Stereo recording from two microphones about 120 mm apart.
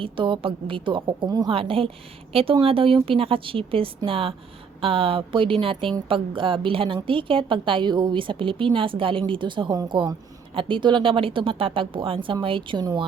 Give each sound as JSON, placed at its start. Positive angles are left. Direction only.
{"t": 0.0, "sound": "a woman's voice", "side_deg": -45}
{"t": 1.5, "sound": "a woman's voice", "side_deg": -50}